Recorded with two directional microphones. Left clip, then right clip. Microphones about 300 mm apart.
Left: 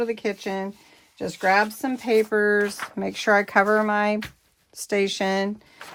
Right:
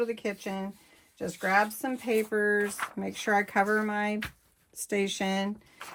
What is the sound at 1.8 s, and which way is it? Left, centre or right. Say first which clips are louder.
Speech: left 7 dB; left.